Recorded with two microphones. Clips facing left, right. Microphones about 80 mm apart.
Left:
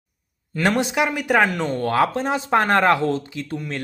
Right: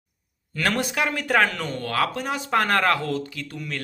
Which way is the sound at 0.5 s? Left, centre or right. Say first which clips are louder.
Left 4 dB; left.